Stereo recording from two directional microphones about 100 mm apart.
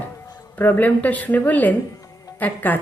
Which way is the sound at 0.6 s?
15° left (ahead or behind).